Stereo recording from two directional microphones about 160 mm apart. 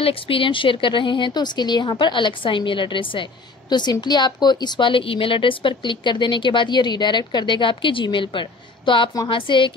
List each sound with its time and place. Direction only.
0.0 s speech: 35° left (ahead or behind)